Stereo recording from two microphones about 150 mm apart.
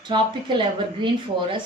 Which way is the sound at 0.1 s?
30° right (ahead or behind).